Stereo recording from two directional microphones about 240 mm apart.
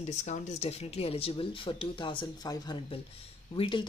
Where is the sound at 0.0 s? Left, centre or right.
Left.